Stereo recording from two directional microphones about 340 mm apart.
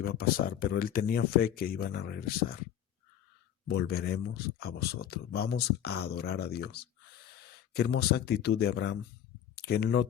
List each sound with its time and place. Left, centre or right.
0.0 s speech: left
3.7 s speech: left